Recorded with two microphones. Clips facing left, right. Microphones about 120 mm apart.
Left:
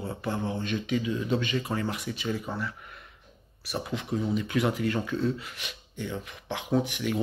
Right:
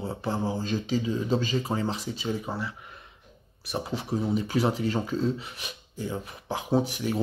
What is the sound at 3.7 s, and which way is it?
Speech, 30° right (ahead or behind).